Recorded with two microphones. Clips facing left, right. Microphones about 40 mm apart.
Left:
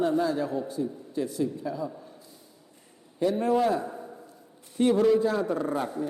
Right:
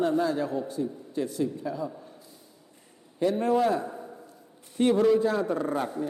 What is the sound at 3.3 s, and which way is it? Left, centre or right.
Speech, right.